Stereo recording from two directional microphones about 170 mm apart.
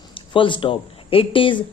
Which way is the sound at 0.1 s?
30° left (ahead or behind).